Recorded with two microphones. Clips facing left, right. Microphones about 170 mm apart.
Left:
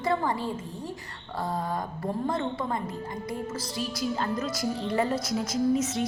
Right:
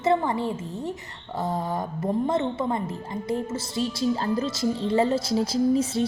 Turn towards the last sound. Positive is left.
turn(degrees=-30)  # may be behind; listen again after turning